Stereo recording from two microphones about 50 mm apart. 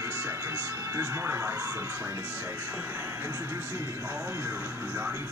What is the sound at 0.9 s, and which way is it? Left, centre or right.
Music, right.